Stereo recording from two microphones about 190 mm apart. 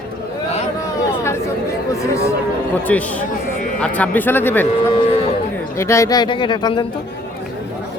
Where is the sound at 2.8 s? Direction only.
10° left (ahead or behind).